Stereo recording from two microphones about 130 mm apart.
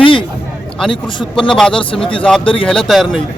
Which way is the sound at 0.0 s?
40° left (ahead or behind).